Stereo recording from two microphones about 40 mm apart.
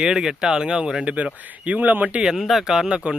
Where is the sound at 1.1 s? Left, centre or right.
Right.